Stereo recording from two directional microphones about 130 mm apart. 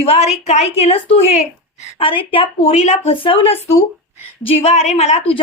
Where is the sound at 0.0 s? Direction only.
55° left (ahead or behind).